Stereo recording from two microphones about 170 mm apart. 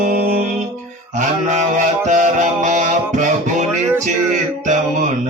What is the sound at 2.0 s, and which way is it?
Music, 45° right (ahead or behind).